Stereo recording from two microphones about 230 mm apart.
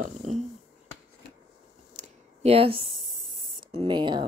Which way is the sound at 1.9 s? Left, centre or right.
Right.